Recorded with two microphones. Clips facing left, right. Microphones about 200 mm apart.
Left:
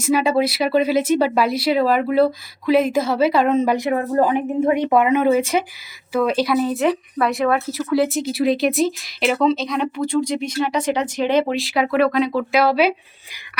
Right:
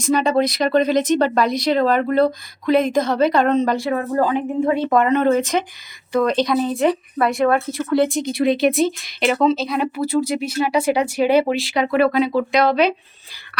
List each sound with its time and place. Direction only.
0.0 s speech: 5° left (ahead or behind)
3.8 s speech: 20° left (ahead or behind)